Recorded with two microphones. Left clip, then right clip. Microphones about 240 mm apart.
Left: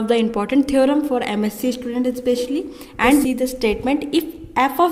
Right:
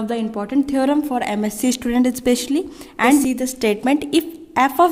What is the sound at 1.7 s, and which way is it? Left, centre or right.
A woman's voice, right.